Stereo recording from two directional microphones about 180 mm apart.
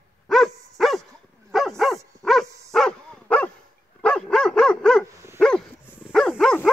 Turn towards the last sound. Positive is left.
turn(degrees=0)  # may be behind; listen again after turning